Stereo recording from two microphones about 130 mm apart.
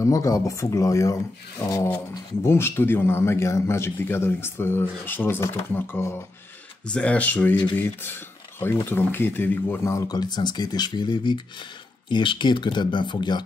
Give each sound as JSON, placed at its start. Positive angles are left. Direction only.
{"t": 0.0, "sound": "a man's voice", "side_deg": 25}